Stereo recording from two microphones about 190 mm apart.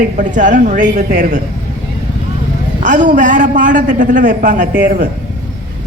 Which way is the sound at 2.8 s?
40° right (ahead or behind).